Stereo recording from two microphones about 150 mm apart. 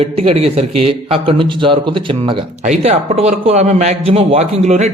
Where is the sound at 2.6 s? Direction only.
50° right (ahead or behind).